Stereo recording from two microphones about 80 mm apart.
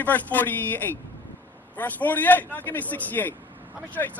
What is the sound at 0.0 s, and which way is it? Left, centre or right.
Speech, left.